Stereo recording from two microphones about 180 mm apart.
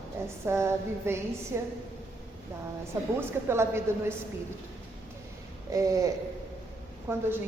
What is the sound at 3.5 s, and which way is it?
Speech, 15° right (ahead or behind).